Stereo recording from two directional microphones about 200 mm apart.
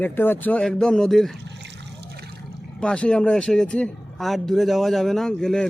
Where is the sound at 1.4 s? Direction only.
55° right (ahead or behind).